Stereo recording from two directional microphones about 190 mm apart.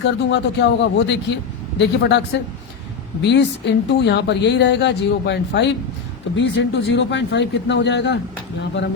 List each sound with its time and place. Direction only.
0.0 s speech: 70° left (ahead or behind)